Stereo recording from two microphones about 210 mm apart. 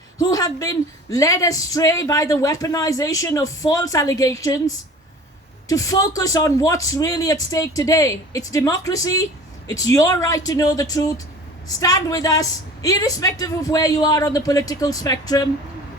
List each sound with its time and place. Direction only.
0.2 s speech: 15° left (ahead or behind)